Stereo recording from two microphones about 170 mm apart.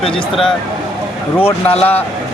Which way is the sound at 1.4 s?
35° left (ahead or behind).